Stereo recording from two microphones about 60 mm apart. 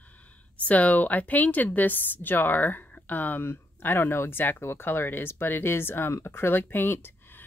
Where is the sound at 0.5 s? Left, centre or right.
Left.